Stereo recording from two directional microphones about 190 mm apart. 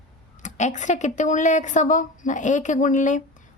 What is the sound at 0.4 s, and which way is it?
A woman's voice, 40° left (ahead or behind).